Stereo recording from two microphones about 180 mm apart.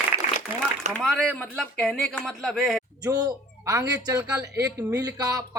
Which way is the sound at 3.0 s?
20° right (ahead or behind).